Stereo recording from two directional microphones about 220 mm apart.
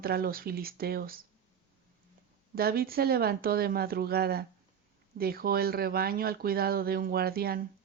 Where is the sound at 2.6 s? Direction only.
45° right (ahead or behind).